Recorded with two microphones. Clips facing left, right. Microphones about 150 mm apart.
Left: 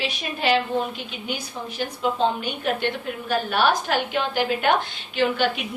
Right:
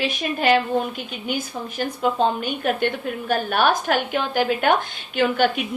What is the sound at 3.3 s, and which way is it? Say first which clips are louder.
A woman's voice: right 1 dB; 50° right (ahead or behind).